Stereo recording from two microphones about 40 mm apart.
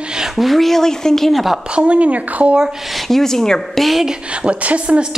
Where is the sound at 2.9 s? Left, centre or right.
Centre.